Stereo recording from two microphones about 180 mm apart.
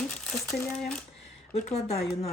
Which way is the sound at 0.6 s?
5° left (ahead or behind).